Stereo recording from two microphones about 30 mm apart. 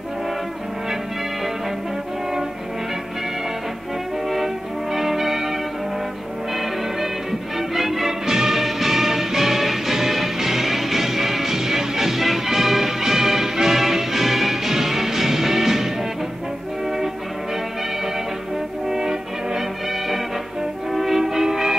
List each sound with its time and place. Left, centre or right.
4.9 s church bell: centre
6.5 s music: centre
18.9 s music: centre
20.9 s music: centre